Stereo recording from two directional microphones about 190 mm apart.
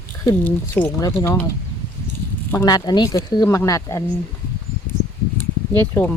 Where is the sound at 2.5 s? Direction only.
20° left (ahead or behind).